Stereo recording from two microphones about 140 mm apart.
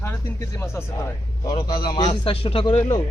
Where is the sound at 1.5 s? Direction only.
30° left (ahead or behind).